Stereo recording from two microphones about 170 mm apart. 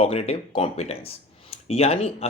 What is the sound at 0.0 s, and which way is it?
Speech, 35° left (ahead or behind).